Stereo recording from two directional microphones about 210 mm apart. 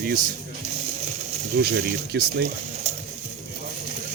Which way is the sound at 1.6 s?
50° right (ahead or behind).